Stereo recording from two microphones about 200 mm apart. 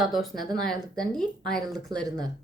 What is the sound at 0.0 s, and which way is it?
A woman's voice, centre (ahead or behind).